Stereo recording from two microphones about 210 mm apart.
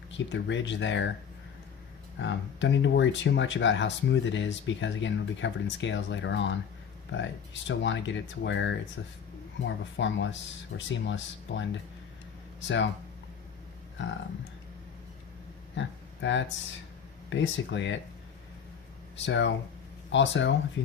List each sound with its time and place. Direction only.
0.1 s speech: 60° left (ahead or behind)
2.1 s speech: 60° left (ahead or behind)
15.7 s a sound: 60° left (ahead or behind)
17.2 s speech: 60° left (ahead or behind)
19.1 s speech: 60° left (ahead or behind)